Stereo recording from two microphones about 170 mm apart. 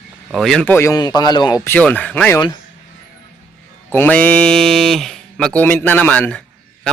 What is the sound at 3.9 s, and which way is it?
Speech, 10° left (ahead or behind).